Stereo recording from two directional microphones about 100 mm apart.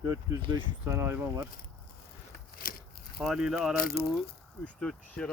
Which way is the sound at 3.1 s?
5° right (ahead or behind).